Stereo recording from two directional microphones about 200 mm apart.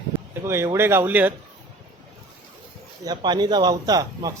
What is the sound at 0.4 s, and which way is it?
Speech, 15° right (ahead or behind).